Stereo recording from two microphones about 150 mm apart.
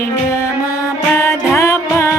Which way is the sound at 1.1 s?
20° left (ahead or behind).